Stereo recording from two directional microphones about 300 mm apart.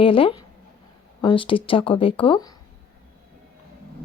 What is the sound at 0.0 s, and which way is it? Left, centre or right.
Speech, centre.